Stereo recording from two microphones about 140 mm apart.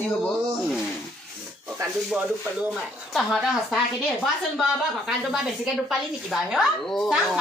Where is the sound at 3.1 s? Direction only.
Centre (ahead or behind).